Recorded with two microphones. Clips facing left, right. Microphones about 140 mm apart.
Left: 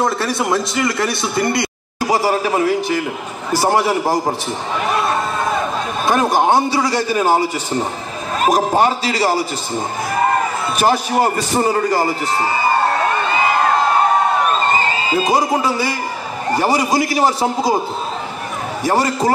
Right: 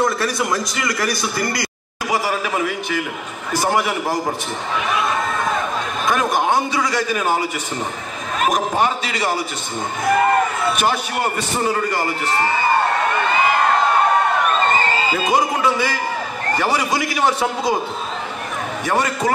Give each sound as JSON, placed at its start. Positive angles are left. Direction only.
{"t": 0.0, "sound": "a man's voice", "side_deg": 25}
{"t": 6.0, "sound": "a man's voice", "side_deg": 30}
{"t": 10.8, "sound": "a man's voice", "side_deg": 35}
{"t": 15.1, "sound": "a man's voice", "side_deg": 35}
{"t": 18.9, "sound": "a man's voice", "side_deg": 35}